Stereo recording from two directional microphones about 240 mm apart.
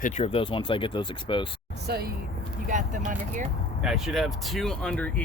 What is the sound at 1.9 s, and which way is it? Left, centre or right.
Speech, right.